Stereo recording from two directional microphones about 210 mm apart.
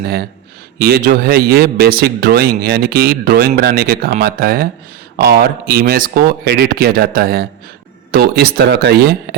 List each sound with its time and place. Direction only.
0.0 s a man's voice: 50° right (ahead or behind)